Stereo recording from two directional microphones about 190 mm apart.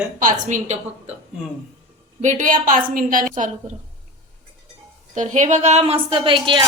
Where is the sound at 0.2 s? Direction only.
45° right (ahead or behind).